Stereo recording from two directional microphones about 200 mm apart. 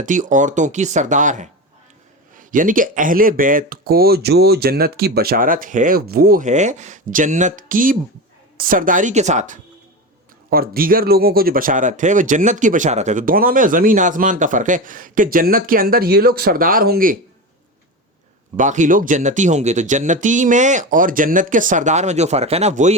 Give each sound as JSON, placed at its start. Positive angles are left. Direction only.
{"t": 0.0, "sound": "speech", "side_deg": -40}
{"t": 10.5, "sound": "speech", "side_deg": -45}
{"t": 18.5, "sound": "speech", "side_deg": -40}